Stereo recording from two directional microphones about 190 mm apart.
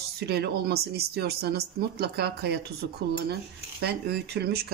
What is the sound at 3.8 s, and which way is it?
Speech, 60° right (ahead or behind).